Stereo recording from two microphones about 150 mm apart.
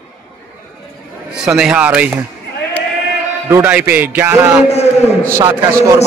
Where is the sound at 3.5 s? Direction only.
15° right (ahead or behind).